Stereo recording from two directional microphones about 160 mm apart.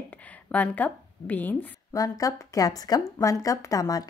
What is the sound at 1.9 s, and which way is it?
Speech, 20° left (ahead or behind).